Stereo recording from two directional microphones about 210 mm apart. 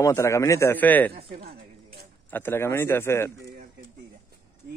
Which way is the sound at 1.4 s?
45° right (ahead or behind).